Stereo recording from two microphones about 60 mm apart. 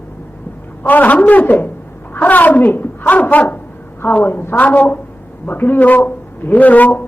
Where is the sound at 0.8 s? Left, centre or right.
Left.